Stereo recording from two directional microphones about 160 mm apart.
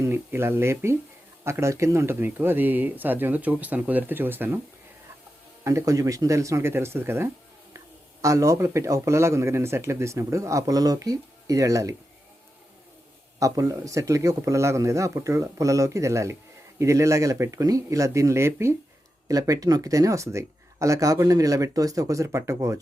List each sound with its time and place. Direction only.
0.0 s speech: 15° right (ahead or behind)
5.6 s speech: 20° right (ahead or behind)
13.4 s speech: 20° right (ahead or behind)